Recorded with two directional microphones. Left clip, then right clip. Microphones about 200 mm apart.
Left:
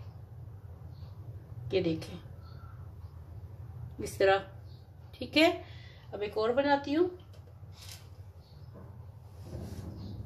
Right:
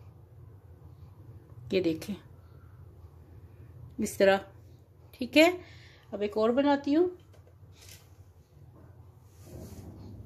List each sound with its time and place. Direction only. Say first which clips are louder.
1.7 s speech: right 2 dB; 55° right (ahead or behind)
4.0 s a woman's voice: right 2 dB; 55° right (ahead or behind)